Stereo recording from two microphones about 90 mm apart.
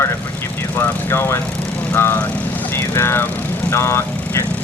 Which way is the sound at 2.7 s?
30° left (ahead or behind).